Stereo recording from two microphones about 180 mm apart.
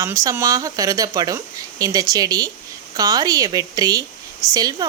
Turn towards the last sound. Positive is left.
turn(degrees=-20)  # may be behind; listen again after turning